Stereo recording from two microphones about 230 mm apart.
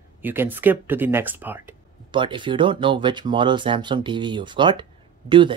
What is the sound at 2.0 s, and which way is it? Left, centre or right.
Speech, right.